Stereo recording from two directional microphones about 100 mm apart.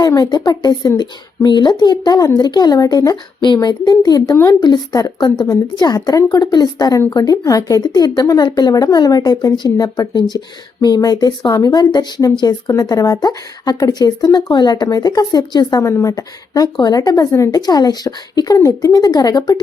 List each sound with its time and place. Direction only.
0.0 s speech: 40° left (ahead or behind)